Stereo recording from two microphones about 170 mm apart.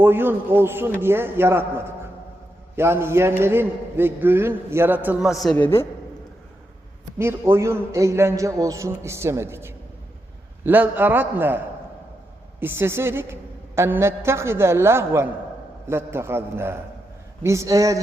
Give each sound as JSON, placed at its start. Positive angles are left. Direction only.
{"t": 0.0, "sound": "a man's voice", "side_deg": -10}
{"t": 5.5, "sound": "a woman's voice", "side_deg": 15}
{"t": 7.2, "sound": "a man's voice", "side_deg": -15}